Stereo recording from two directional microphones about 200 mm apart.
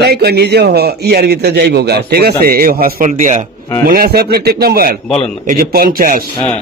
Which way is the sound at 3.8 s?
50° right (ahead or behind).